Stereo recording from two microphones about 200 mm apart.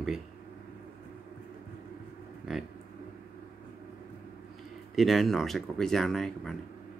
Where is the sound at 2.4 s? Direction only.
Centre (ahead or behind).